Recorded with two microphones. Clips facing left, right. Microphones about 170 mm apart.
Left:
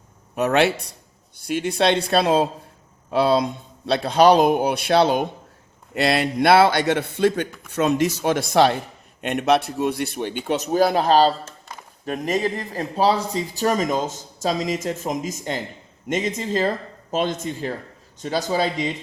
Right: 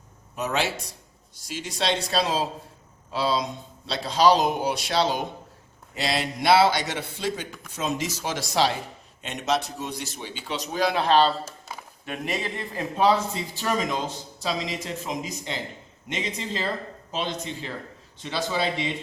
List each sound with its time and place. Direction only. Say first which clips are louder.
0.3 s speech: left 8 dB; 65° left (ahead or behind); by 11.3 s 40° left (ahead or behind)
11.4 s a sound: right 1 dB; 5° right (ahead or behind)
12.0 s speech: left 7 dB; 40° left (ahead or behind)